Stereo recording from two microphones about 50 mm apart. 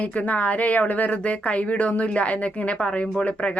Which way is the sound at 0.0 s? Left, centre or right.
Left.